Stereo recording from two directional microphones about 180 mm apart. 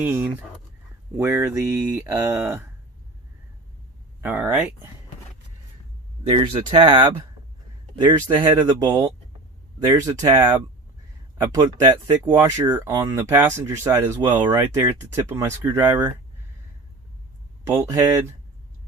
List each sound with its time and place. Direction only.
0.0 s speech: 10° right (ahead or behind)
4.2 s speech: 10° right (ahead or behind)
6.3 s speech: 30° right (ahead or behind)
17.7 s speech: 15° right (ahead or behind)